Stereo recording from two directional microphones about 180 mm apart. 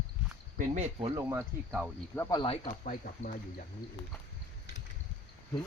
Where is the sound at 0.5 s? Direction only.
45° right (ahead or behind).